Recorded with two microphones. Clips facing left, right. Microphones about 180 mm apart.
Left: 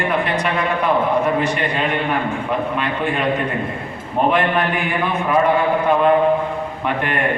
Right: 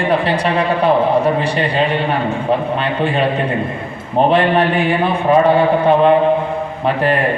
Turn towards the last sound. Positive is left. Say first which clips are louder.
# right 6 dB
turn(degrees=-35)  # may be behind; listen again after turning